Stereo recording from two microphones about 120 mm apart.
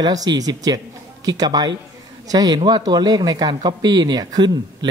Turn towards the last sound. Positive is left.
turn(degrees=-35)  # may be behind; listen again after turning